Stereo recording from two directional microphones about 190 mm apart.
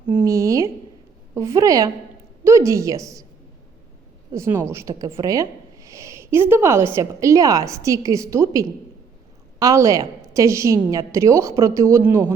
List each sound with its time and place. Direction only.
0.1 s a woman's voice: 15° right (ahead or behind)
4.3 s a woman's voice: 15° right (ahead or behind)